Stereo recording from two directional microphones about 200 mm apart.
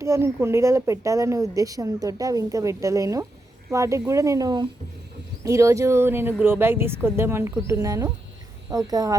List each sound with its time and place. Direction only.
0.0 s speech: 15° right (ahead or behind)